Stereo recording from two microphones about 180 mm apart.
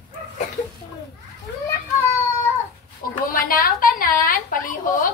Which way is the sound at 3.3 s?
50° left (ahead or behind).